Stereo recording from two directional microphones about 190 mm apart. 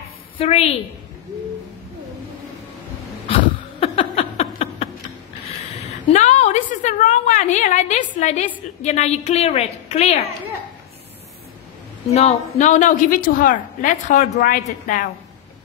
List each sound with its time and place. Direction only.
0.4 s a woman's voice: 30° left (ahead or behind)
3.8 s a sound: 30° left (ahead or behind)
6.1 s a woman's voice: 35° left (ahead or behind)
12.1 s a woman's voice: 35° left (ahead or behind)